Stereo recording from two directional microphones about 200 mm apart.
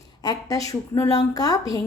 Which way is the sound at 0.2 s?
20° left (ahead or behind).